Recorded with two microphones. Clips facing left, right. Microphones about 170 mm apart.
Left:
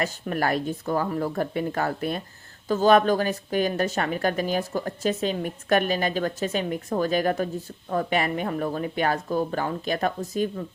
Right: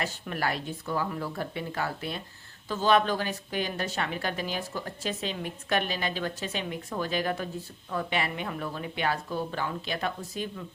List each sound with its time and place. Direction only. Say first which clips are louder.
0.0 s a woman's voice: left 5 dB; 45° left (ahead or behind)